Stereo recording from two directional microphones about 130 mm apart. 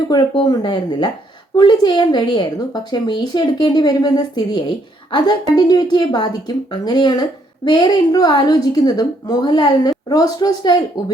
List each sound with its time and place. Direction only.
0.1 s a woman's voice: 30° left (ahead or behind)